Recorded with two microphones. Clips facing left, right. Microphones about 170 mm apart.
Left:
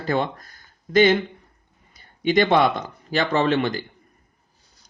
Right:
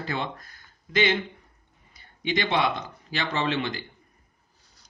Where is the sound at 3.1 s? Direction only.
45° left (ahead or behind).